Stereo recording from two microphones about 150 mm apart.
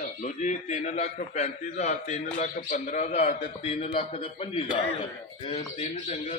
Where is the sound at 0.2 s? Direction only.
50° left (ahead or behind).